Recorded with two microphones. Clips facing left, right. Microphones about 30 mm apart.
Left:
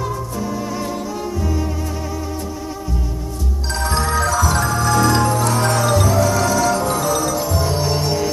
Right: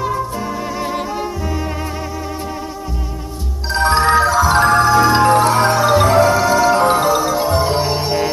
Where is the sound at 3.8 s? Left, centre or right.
Right.